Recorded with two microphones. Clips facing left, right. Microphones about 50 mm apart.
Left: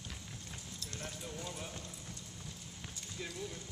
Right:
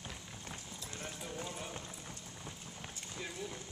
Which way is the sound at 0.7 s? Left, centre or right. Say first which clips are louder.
Left 2 dB; centre.